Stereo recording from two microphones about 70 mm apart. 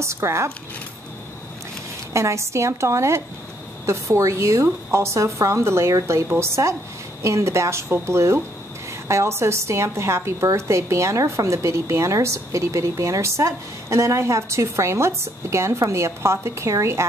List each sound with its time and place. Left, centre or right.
0.0 s a woman's voice: right
2.1 s a woman's voice: right